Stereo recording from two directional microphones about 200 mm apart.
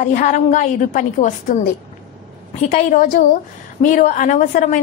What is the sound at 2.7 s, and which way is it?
A woman's voice, 40° left (ahead or behind).